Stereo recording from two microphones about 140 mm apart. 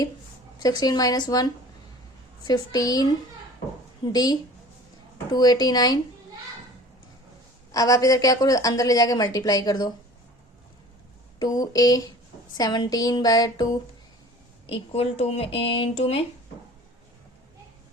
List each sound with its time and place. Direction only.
0.8 s a woman's voice: 25° left (ahead or behind)
7.7 s a woman's voice: 25° left (ahead or behind)
11.3 s a woman's voice: 25° left (ahead or behind)
14.7 s speech: 45° left (ahead or behind)